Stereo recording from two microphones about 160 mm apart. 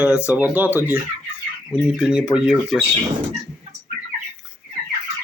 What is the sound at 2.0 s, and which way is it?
Speech, 5° right (ahead or behind).